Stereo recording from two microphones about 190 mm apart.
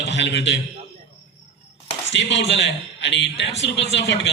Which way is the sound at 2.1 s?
70° left (ahead or behind).